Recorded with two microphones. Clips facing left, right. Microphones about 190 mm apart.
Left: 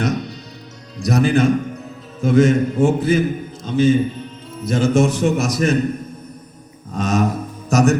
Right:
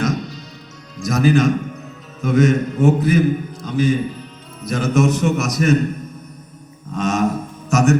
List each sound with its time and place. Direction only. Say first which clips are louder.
0.0 s music: even; 65° left (ahead or behind)
0.9 s a man's voice: even; 35° left (ahead or behind)
6.9 s mantra: even; 35° left (ahead or behind)
7.7 s a man's voice: left 1 dB; 35° left (ahead or behind)